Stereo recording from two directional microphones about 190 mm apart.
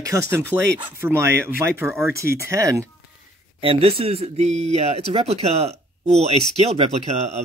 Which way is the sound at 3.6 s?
30° right (ahead or behind).